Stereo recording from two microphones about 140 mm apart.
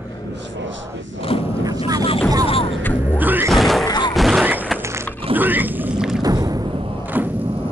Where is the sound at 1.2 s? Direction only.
40° left (ahead or behind).